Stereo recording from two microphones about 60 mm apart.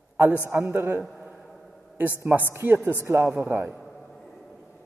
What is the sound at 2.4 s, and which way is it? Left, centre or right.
Speech, right.